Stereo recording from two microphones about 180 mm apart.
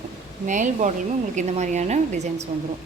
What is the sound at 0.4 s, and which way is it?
Speech, 45° right (ahead or behind).